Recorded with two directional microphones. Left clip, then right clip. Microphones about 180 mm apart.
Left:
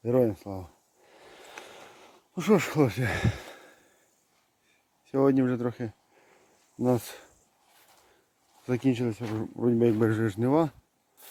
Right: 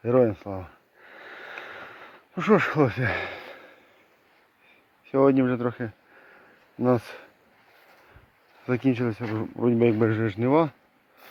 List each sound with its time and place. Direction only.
0.0 s speech: 20° left (ahead or behind)
1.1 s a sound: 20° left (ahead or behind)
5.1 s speech: 25° left (ahead or behind)
8.6 s speech: 25° left (ahead or behind)